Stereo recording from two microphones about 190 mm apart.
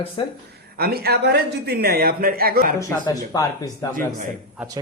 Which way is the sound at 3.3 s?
20° left (ahead or behind).